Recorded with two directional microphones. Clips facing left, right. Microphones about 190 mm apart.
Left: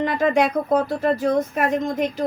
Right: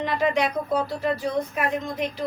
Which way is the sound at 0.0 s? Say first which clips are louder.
Left 4 dB; 50° left (ahead or behind).